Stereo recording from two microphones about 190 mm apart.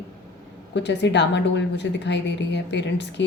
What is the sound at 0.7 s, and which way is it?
Speech, 65° left (ahead or behind).